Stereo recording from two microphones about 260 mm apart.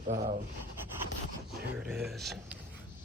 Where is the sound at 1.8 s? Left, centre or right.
Centre.